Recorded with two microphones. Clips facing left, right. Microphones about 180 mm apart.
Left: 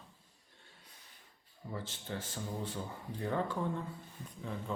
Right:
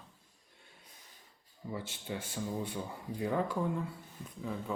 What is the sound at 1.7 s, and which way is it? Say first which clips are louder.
Speech: right 2 dB; 10° right (ahead or behind).